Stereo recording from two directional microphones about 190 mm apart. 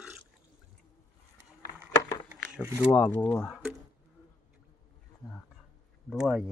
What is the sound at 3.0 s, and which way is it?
Speech, 10° left (ahead or behind).